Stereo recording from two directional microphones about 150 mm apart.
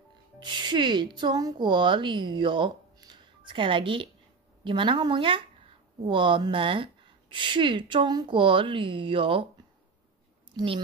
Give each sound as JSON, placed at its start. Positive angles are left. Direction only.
{"t": 0.4, "sound": "speech", "side_deg": -30}
{"t": 10.5, "sound": "speech", "side_deg": -35}